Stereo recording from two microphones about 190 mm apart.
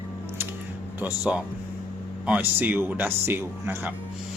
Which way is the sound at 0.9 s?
10° right (ahead or behind).